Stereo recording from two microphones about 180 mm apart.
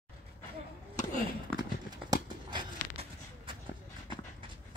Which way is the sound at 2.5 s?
25° right (ahead or behind).